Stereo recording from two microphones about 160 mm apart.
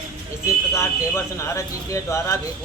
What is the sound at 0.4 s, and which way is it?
A man's voice, 15° left (ahead or behind).